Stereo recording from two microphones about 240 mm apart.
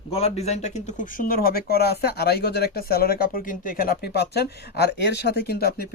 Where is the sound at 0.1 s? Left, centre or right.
Left.